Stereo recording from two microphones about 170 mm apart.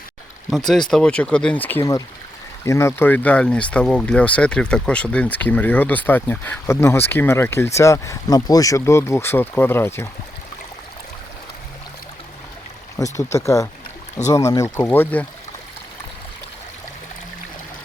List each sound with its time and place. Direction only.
0.5 s speech: centre (ahead or behind)
13.0 s speech: 20° left (ahead or behind)